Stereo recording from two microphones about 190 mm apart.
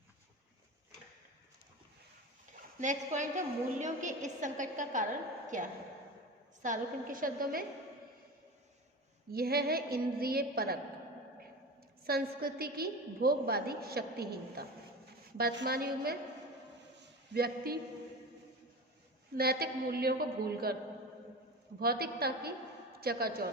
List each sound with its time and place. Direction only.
2.8 s a woman's voice: 40° right (ahead or behind)
9.3 s a woman's voice: 55° right (ahead or behind)
12.0 s a woman's voice: 55° right (ahead or behind)
17.0 s a sound: 55° right (ahead or behind)
19.4 s a woman's voice: 55° right (ahead or behind)
21.8 s a woman's voice: 55° right (ahead or behind)